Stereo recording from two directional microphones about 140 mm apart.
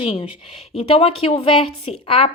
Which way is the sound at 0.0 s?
40° left (ahead or behind).